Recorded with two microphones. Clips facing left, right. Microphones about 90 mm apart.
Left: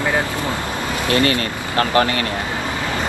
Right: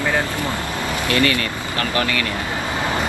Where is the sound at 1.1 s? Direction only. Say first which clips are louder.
Left 2 dB; 30° left (ahead or behind).